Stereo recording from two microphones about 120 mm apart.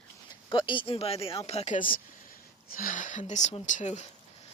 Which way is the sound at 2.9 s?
90° left.